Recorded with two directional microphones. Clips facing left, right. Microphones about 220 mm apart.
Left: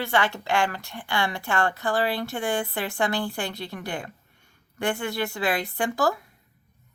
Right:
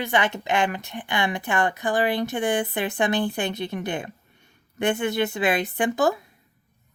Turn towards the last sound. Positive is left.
turn(degrees=-20)  # may be behind; listen again after turning